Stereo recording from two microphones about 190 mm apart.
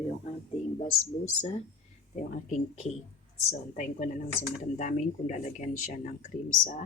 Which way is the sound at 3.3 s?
40° left (ahead or behind).